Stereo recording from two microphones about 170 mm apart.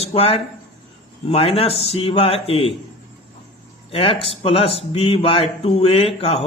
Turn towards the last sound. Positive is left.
turn(degrees=35)  # may be behind; listen again after turning